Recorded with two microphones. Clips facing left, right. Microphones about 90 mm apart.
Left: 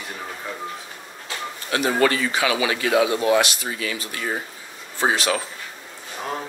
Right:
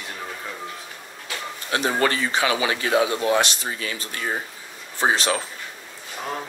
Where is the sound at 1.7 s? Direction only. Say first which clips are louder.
Left 2 dB; 30° right (ahead or behind).